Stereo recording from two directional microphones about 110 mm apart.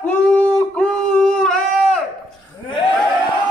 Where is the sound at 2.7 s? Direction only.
45° left (ahead or behind).